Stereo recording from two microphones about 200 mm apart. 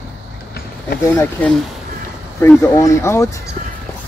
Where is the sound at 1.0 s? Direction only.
10° left (ahead or behind).